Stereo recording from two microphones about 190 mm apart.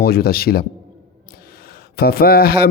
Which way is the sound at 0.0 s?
55° left (ahead or behind).